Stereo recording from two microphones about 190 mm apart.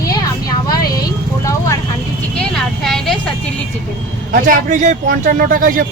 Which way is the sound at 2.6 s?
Centre (ahead or behind).